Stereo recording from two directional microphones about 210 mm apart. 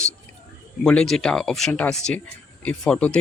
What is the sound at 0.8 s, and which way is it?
Speech, 5° left (ahead or behind).